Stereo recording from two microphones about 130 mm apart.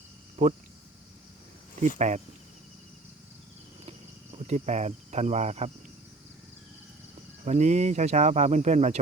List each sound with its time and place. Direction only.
0.4 s speech: 60° right (ahead or behind)
2.0 s speech: 65° right (ahead or behind)
4.4 s speech: 60° right (ahead or behind)
7.4 s speech: 65° right (ahead or behind)